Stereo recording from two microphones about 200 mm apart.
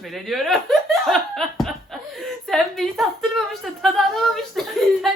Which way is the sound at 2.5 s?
Centre (ahead or behind).